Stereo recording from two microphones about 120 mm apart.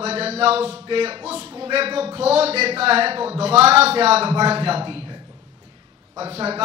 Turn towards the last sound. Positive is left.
turn(degrees=-55)  # may be behind; listen again after turning